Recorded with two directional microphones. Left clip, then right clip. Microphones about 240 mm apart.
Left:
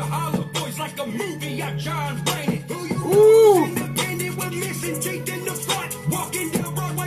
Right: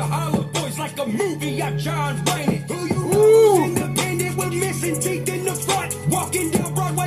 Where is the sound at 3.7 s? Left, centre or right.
Right.